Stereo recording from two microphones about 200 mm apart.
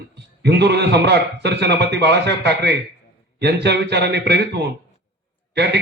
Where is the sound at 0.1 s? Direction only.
60° right (ahead or behind).